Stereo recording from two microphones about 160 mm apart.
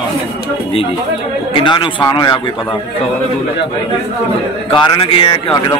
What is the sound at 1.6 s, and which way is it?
Speech, 30° left (ahead or behind).